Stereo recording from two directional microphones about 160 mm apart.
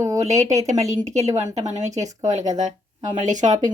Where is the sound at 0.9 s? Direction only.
45° right (ahead or behind).